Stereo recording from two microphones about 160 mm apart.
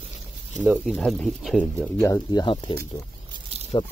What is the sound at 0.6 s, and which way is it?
Speech, centre (ahead or behind).